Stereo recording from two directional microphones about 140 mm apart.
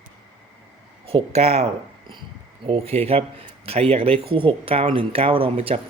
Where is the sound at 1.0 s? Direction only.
45° right (ahead or behind).